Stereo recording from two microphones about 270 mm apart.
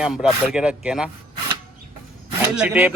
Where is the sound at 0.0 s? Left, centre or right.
Centre.